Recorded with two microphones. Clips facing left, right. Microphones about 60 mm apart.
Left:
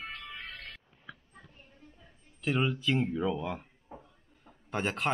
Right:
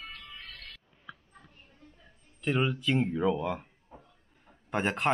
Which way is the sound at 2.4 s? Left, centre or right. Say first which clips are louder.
Right 1 dB; centre.